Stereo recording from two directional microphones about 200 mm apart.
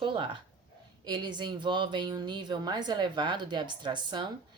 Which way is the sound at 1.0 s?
20° right (ahead or behind).